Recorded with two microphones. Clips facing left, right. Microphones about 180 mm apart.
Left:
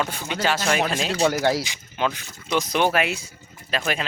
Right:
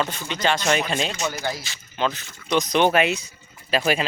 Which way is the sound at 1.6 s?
15° left (ahead or behind).